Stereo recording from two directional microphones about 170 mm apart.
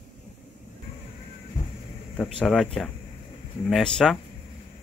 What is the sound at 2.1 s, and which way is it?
Speech, centre (ahead or behind).